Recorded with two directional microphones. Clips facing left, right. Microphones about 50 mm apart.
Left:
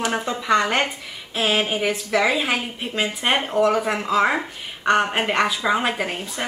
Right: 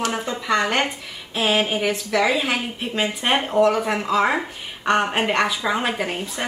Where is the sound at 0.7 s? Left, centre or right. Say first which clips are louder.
Even; centre.